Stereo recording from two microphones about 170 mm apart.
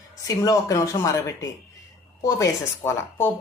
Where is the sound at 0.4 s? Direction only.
20° left (ahead or behind).